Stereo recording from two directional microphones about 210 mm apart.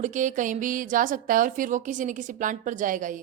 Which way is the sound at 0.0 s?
35° right (ahead or behind).